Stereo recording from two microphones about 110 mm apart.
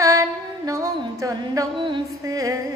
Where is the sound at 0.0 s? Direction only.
30° right (ahead or behind).